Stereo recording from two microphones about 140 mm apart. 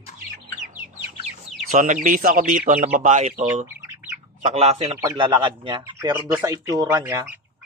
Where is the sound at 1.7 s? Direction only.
65° right (ahead or behind).